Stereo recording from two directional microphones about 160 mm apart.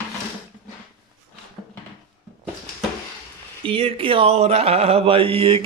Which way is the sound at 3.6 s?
35° right (ahead or behind).